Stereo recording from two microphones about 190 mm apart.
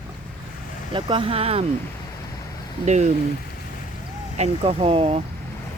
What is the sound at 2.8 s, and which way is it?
Speech, 40° right (ahead or behind).